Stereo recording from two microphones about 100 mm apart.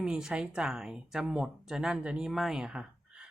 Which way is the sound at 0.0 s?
5° right (ahead or behind).